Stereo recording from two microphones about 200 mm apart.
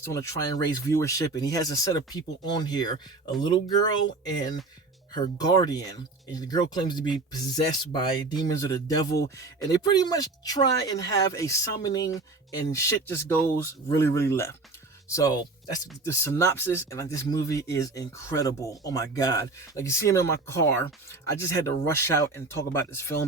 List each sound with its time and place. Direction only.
0.0 s speech: 15° left (ahead or behind)